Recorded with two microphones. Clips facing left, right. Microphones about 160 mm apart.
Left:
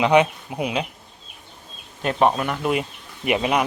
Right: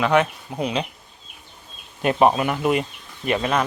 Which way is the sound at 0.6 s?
5° left (ahead or behind).